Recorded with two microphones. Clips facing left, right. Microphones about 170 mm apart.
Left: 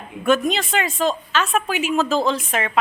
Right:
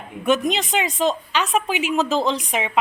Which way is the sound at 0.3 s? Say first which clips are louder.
Left 1 dB; 20° right (ahead or behind).